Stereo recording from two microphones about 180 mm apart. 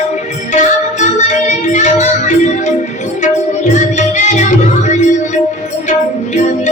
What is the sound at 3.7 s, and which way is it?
Music, 40° left (ahead or behind).